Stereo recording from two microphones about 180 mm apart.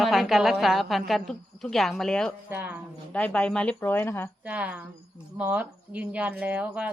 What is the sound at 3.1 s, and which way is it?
A woman's voice, 5° left (ahead or behind).